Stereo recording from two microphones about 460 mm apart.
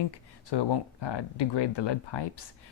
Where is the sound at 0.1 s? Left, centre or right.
Left.